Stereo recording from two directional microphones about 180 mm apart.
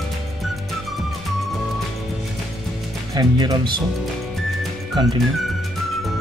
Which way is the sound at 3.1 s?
25° right (ahead or behind).